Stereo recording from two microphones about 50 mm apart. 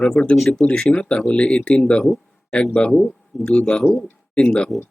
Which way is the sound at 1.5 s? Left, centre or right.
Left.